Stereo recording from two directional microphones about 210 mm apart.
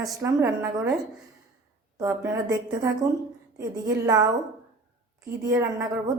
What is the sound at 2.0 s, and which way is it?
A woman's voice, 15° right (ahead or behind).